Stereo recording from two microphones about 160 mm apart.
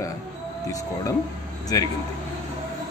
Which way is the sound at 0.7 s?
20° left (ahead or behind).